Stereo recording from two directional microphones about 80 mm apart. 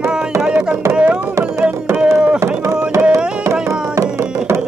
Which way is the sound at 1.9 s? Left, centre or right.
Centre.